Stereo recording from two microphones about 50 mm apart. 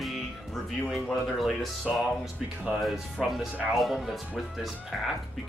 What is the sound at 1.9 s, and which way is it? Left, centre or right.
Speech, centre.